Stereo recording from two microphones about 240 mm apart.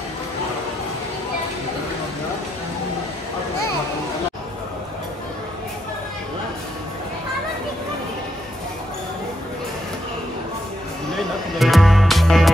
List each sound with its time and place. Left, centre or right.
11.5 s music: centre